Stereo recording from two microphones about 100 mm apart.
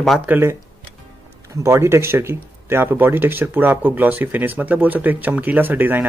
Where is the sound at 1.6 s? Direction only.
30° right (ahead or behind).